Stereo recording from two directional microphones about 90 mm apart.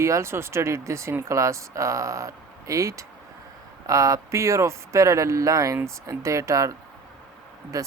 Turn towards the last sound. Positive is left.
turn(degrees=-40)  # may be behind; listen again after turning